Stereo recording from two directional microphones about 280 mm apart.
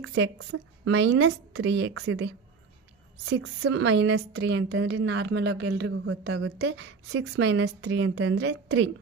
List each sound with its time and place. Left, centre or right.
0.0 s a woman's voice: right